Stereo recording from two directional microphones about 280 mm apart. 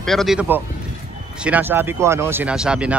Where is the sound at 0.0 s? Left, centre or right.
Centre.